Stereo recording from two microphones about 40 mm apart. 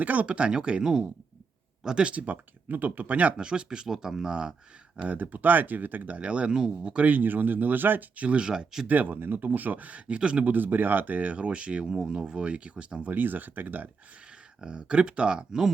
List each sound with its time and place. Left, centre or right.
0.0 s speech: right; by 2.0 s centre
2.0 s speech: right
3.3 s speech: right
5.0 s speech: right
6.1 s speech: right
7.1 s speech: right
8.1 s speech: right
8.4 s speech: centre
8.9 s speech: right
10.2 s speech: right
10.4 s speech: right
13.1 s speech: right
14.6 s speech: right